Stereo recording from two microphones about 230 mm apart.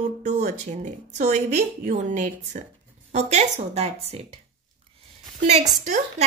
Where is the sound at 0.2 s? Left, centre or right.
Right.